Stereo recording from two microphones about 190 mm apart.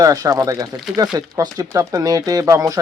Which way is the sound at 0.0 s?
20° right (ahead or behind).